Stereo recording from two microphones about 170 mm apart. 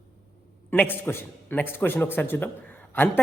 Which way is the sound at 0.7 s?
10° left (ahead or behind).